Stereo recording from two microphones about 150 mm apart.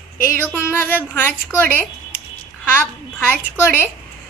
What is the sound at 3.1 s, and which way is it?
Speech, 15° left (ahead or behind).